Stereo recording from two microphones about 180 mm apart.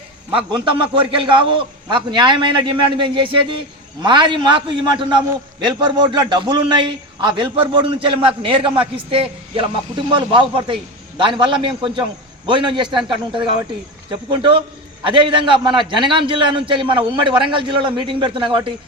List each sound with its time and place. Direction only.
0.3 s a man's voice: 30° right (ahead or behind)